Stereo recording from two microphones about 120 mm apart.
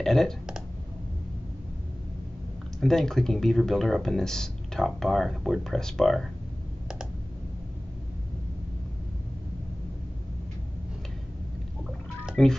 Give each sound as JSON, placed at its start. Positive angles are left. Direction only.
{"t": 0.0, "sound": "speech", "side_deg": 5}
{"t": 2.8, "sound": "speech", "side_deg": 5}
{"t": 12.3, "sound": "music", "side_deg": 5}